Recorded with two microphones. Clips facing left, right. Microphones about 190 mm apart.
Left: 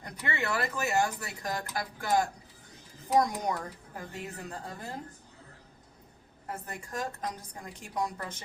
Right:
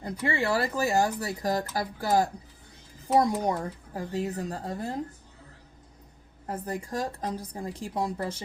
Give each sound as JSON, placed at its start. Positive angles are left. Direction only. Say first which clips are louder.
{"t": 0.0, "sound": "speech", "louder": "right 6 dB", "side_deg": -30}
{"t": 6.7, "sound": "speech", "louder": "right 6 dB", "side_deg": -35}